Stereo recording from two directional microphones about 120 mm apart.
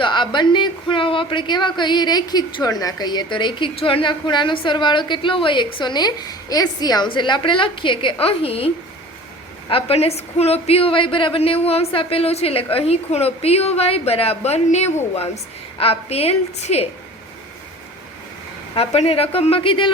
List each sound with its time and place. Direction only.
0.0 s a woman's voice: 40° left (ahead or behind); by 16.9 s 60° left (ahead or behind)
18.9 s a woman's voice: 55° left (ahead or behind)